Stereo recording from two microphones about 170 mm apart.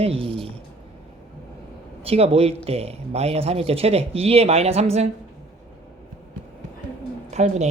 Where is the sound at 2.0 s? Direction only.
35° right (ahead or behind).